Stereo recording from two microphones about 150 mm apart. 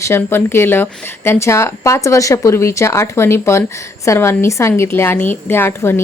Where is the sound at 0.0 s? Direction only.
15° left (ahead or behind).